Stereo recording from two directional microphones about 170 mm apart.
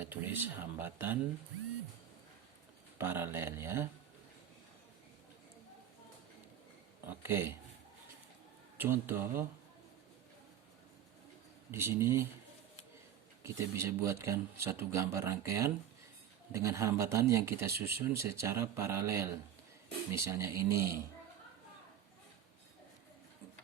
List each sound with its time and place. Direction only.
0.0 s speech: 10° right (ahead or behind)
3.0 s speech: 15° right (ahead or behind)
7.1 s speech: 15° right (ahead or behind)
8.8 s speech: 15° right (ahead or behind)
11.7 s speech: 15° right (ahead or behind)
13.4 s speech: 15° right (ahead or behind)